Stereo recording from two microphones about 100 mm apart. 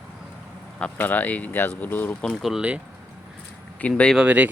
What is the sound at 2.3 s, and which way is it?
Speech, centre (ahead or behind).